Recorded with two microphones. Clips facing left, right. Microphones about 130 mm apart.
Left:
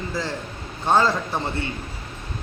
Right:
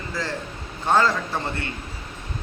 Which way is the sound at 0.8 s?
15° left (ahead or behind).